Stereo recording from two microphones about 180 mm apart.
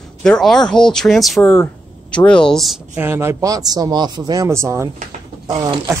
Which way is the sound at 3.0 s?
15° right (ahead or behind).